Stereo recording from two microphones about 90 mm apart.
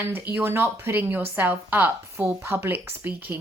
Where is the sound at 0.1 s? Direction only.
25° right (ahead or behind).